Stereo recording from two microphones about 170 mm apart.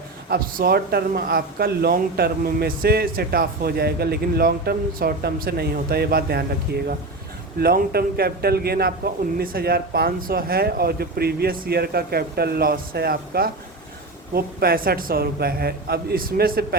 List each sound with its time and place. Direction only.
0.3 s speech: 60° right (ahead or behind)
7.6 s speech: 65° right (ahead or behind)